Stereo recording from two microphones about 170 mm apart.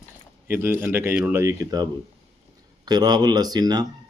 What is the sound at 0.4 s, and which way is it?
Speech, 15° right (ahead or behind).